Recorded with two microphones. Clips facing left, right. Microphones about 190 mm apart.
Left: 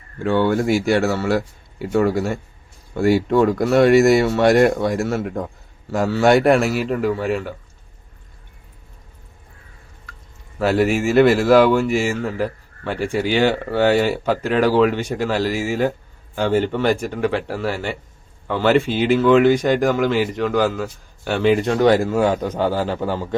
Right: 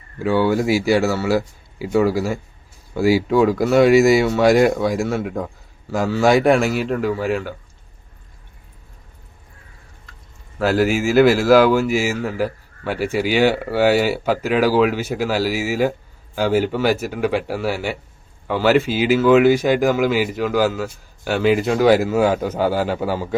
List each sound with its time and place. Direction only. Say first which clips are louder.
0.2 s a man's voice: even; 5° right (ahead or behind)
10.6 s a man's voice: even; centre (ahead or behind)